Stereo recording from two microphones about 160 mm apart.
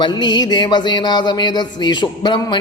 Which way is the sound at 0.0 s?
30° left (ahead or behind).